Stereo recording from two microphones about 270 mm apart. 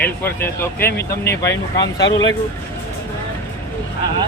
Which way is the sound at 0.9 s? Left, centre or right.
Left.